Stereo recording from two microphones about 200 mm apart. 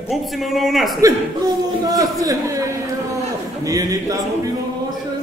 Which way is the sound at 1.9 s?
15° right (ahead or behind).